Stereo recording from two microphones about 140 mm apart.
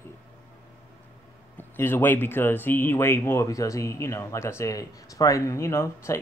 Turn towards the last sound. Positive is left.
turn(degrees=20)  # may be behind; listen again after turning